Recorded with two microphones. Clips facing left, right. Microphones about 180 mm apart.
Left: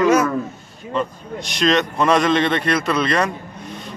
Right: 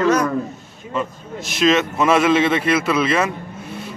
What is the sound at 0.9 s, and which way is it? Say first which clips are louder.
A man's voice: left 1 dB; 5° right (ahead or behind).